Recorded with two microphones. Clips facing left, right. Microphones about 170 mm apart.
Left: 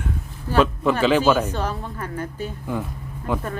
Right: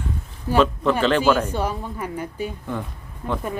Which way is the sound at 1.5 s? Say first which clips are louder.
Right 2 dB; 10° right (ahead or behind).